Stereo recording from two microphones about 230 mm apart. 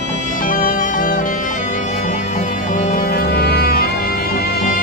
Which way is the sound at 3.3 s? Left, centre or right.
Left.